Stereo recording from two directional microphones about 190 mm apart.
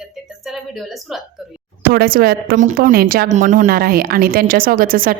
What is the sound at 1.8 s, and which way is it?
A woman's voice, 50° right (ahead or behind).